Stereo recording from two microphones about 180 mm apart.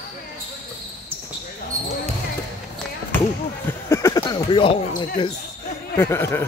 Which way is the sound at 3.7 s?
15° left (ahead or behind).